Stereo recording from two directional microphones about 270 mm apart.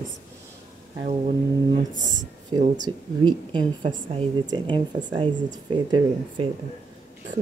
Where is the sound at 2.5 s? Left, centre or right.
Centre.